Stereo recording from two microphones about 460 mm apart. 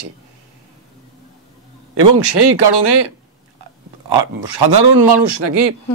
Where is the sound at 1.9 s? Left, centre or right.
Right.